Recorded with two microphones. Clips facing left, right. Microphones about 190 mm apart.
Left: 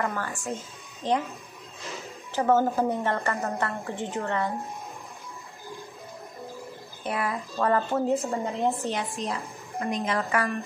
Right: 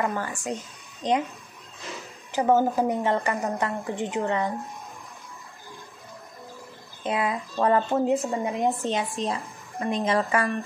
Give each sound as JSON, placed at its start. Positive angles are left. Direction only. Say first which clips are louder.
{"t": 0.0, "sound": "a woman's voice", "louder": "right 2 dB", "side_deg": -15}
{"t": 2.3, "sound": "a woman's voice", "louder": "right 1 dB", "side_deg": -15}
{"t": 7.0, "sound": "a woman's voice", "louder": "right 3 dB", "side_deg": -20}